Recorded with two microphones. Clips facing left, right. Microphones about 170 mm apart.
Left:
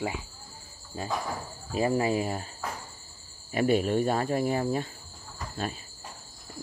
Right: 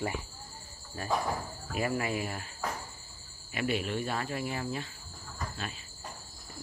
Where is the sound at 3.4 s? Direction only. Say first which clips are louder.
Left 8 dB; 40° left (ahead or behind).